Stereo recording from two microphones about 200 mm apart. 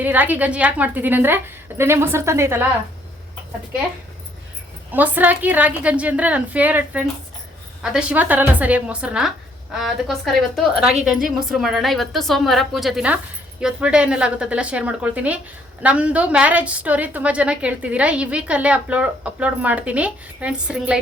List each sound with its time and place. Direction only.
0.0 s a woman's voice: 10° right (ahead or behind)
4.9 s a woman's voice: 10° right (ahead or behind)